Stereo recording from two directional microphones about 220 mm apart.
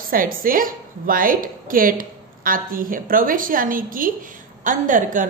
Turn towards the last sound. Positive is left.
turn(degrees=-35)  # may be behind; listen again after turning